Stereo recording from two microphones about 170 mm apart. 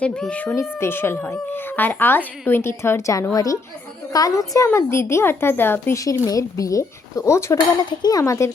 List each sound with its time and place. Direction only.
0.0 s a woman's voice: 5° left (ahead or behind)